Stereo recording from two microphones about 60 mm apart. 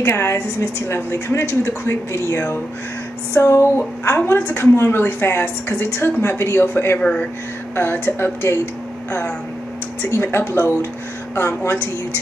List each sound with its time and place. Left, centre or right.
0.0 s a woman's voice: left
7.0 s speech: centre
7.7 s a woman's voice: left
10.0 s a woman's voice: left